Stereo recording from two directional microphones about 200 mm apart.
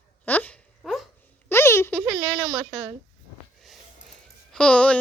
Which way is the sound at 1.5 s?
10° left (ahead or behind).